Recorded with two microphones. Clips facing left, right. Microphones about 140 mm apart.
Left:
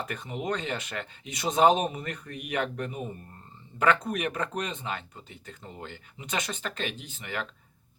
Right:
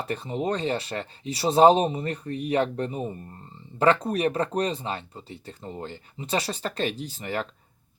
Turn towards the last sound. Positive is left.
turn(degrees=-35)  # may be behind; listen again after turning